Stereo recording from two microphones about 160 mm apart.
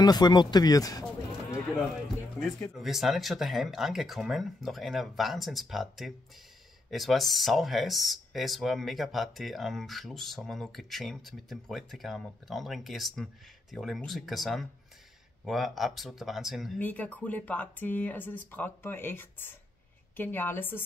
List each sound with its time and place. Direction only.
0.0 s speech: 25° left (ahead or behind)
2.4 s speech: centre (ahead or behind)
16.8 s speech: 10° left (ahead or behind)